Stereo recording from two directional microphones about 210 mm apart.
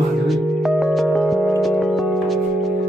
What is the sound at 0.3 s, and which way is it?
Music, centre (ahead or behind).